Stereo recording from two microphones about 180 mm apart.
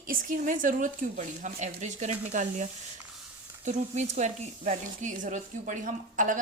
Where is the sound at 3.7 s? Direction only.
40° right (ahead or behind).